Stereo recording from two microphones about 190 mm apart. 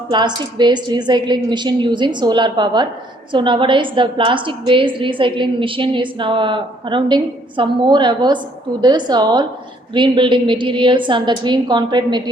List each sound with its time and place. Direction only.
0.1 s a woman's voice: 25° right (ahead or behind)